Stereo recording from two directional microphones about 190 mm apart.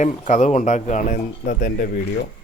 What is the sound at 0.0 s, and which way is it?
Speech, 40° left (ahead or behind).